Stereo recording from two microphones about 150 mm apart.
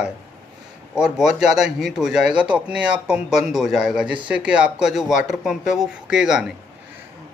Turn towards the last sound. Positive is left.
turn(degrees=-5)  # may be behind; listen again after turning